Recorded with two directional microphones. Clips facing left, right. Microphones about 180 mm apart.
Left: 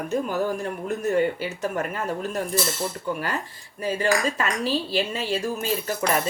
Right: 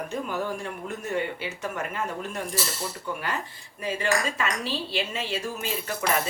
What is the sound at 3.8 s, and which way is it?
Speech, 40° left (ahead or behind).